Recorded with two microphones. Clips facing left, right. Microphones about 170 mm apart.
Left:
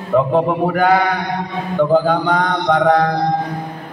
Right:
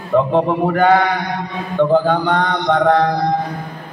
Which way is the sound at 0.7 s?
5° left (ahead or behind).